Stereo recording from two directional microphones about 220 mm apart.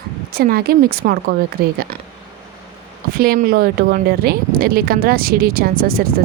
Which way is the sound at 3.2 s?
45° right (ahead or behind).